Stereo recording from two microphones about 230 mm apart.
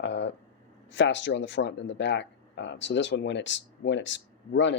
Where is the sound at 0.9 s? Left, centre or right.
Left.